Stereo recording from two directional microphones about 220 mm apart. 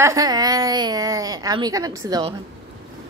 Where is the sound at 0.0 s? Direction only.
15° right (ahead or behind).